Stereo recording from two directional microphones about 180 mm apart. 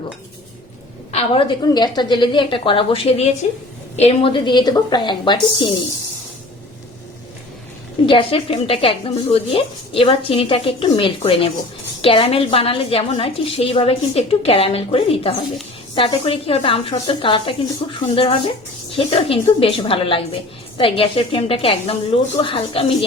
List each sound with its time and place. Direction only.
1.1 s a woman's voice: 30° left (ahead or behind)
8.0 s a woman's voice: 30° left (ahead or behind)